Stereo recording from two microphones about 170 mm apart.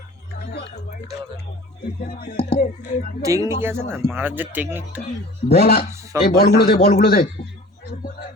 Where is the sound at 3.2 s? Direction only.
20° right (ahead or behind).